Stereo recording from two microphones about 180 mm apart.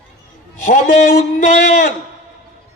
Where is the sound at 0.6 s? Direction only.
45° left (ahead or behind).